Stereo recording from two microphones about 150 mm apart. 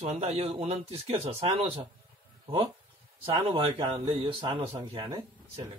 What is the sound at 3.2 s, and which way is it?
Speech, 35° right (ahead or behind).